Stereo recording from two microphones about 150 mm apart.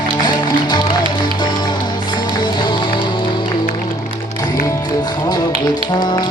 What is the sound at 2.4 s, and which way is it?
Music, 30° left (ahead or behind).